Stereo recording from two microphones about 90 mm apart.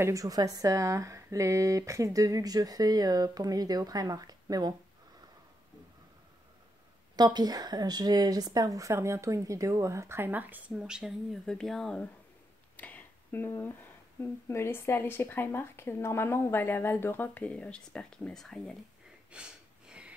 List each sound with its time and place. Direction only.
0.0 s speech: 40° right (ahead or behind)
7.2 s a woman's voice: 50° right (ahead or behind); by 10.6 s 20° right (ahead or behind)
10.7 s speech: 10° right (ahead or behind)
11.4 s speech: 5° left (ahead or behind)
12.7 s a sound: 20° left (ahead or behind)
13.5 s speech: 25° left (ahead or behind); by 18.8 s 5° left (ahead or behind)
19.3 s sniff: 10° right (ahead or behind)